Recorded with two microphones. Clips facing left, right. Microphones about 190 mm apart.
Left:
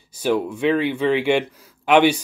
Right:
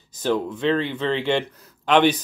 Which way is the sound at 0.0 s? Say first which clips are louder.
Left 2 dB; 10° left (ahead or behind).